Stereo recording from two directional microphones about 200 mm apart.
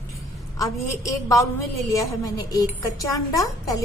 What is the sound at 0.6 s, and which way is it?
A woman's voice, 15° left (ahead or behind).